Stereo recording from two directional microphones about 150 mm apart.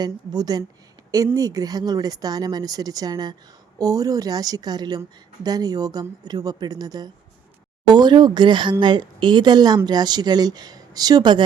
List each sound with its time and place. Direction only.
0.0 s a woman's voice: 25° right (ahead or behind)